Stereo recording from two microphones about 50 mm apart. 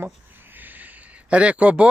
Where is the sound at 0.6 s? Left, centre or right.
Right.